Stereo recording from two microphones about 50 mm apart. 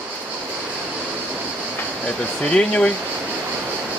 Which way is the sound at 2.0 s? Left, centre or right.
Centre.